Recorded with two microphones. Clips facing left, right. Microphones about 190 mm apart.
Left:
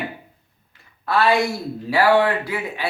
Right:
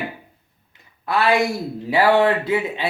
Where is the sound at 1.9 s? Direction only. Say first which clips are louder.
Right 1 dB; 20° right (ahead or behind).